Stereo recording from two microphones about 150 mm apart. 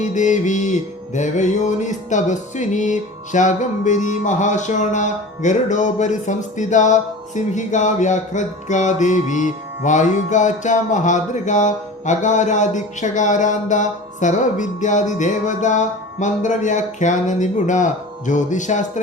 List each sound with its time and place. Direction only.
0.0 s music: 55° left (ahead or behind)